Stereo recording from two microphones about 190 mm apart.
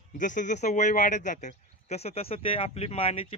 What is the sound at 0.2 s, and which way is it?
Speech, 40° left (ahead or behind).